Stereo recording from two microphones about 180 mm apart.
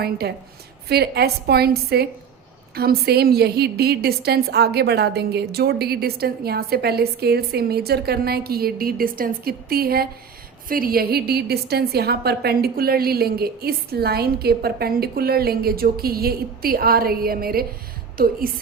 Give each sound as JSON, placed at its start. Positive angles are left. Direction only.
{"t": 0.0, "sound": "a woman's voice", "side_deg": -60}